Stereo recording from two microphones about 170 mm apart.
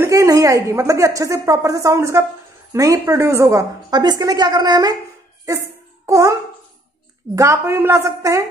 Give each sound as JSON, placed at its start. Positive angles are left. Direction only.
{"t": 0.0, "sound": "a woman's voice", "side_deg": -15}
{"t": 7.3, "sound": "a woman's voice", "side_deg": -15}